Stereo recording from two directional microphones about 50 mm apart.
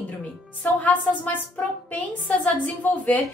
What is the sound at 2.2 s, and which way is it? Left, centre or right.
Speech, left.